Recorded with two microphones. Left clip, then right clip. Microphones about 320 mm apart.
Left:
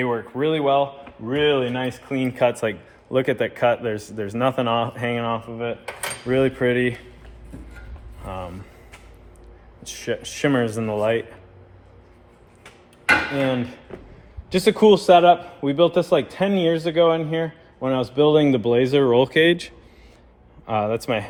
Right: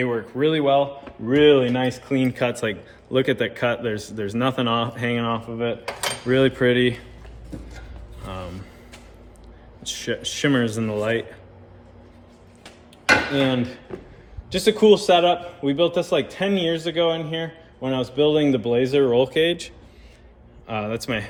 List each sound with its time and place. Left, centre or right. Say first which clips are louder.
0.0 s speech: right 1 dB; centre
8.2 s music: left 2 dB; centre
9.8 s speech: right 1 dB; centre
12.6 s dishes: even; centre
14.5 s a man's voice: left 1 dB; left